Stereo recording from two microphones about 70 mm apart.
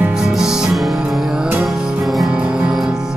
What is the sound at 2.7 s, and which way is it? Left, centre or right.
Music, centre.